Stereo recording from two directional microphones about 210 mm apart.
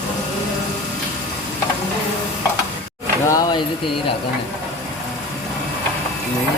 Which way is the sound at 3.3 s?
15° left (ahead or behind).